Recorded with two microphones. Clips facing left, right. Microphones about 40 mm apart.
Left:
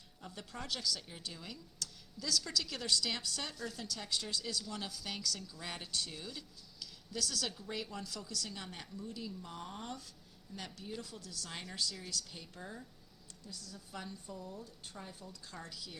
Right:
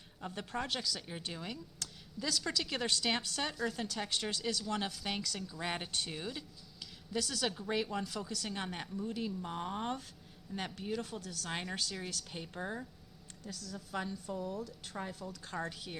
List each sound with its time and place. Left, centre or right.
0.2 s a woman's voice: right
7.5 s a woman's voice: right
8.4 s a woman's voice: right
13.4 s a woman's voice: right
15.4 s a woman's voice: right